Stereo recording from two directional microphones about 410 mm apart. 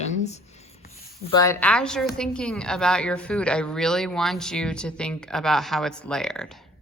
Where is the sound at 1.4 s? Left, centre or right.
Centre.